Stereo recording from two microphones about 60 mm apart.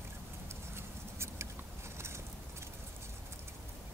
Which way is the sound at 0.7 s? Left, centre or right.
Right.